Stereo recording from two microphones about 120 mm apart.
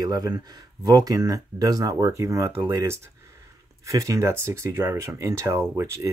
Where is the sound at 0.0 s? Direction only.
30° right (ahead or behind).